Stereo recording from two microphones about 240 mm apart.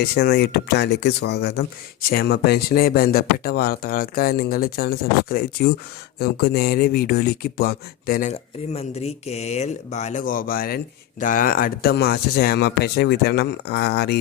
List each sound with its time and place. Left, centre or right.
0.0 s speech: left